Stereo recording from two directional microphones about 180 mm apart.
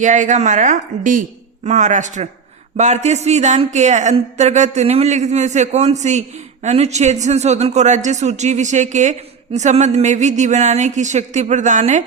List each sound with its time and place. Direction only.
0.0 s a woman's voice: 45° right (ahead or behind)